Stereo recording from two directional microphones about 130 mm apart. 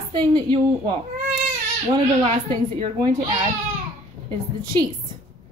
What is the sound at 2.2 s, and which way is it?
Speech, 45° right (ahead or behind).